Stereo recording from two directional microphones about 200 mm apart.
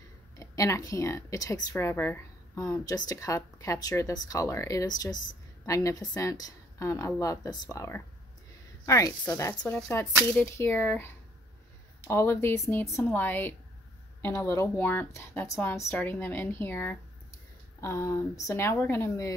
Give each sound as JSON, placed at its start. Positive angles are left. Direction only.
{"t": 0.4, "sound": "a woman's voice", "side_deg": 15}